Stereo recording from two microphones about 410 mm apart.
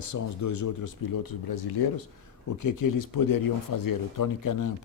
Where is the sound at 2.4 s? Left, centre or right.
Left.